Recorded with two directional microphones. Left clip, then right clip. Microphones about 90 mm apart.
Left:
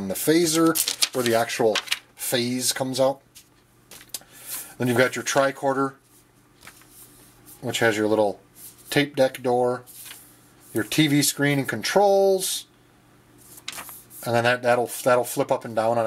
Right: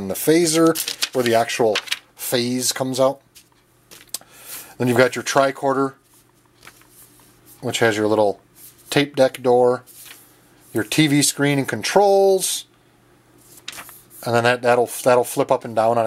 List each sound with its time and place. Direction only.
0.0 s speech: 30° right (ahead or behind)
0.7 s speech: 5° left (ahead or behind)
1.3 s speech: 25° right (ahead or behind)
1.6 s speech: 5° right (ahead or behind)
2.1 s speech: 25° right (ahead or behind)
4.7 s speech: 30° right (ahead or behind)
6.6 s a sound: 5° right (ahead or behind)
7.6 s speech: 30° right (ahead or behind)
13.7 s a sound: centre (ahead or behind)
14.2 s speech: 25° right (ahead or behind)